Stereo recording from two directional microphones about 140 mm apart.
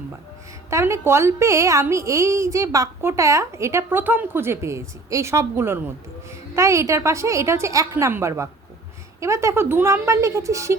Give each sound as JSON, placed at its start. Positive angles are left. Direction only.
{"t": 0.7, "sound": "a woman's voice", "side_deg": -20}